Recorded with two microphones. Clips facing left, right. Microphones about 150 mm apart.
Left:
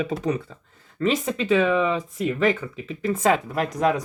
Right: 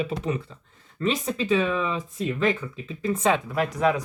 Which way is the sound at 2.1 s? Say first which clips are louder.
Left 2 dB; 30° right (ahead or behind).